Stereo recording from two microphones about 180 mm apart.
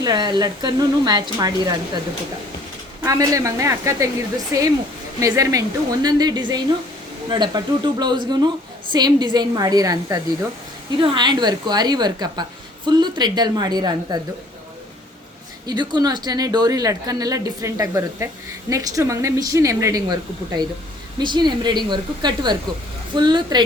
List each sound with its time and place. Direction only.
0.0 s a woman's voice: 25° right (ahead or behind)
3.0 s a woman's voice: 20° right (ahead or behind)
15.6 s a woman's voice: 25° right (ahead or behind)
21.2 s a woman's voice: 25° right (ahead or behind)